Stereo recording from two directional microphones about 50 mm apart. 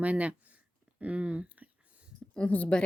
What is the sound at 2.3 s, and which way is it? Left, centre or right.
Speech, left.